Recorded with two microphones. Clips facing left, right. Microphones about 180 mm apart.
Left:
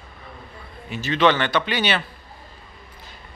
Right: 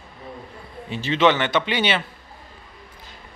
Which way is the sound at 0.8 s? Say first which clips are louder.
Even; 30° right (ahead or behind).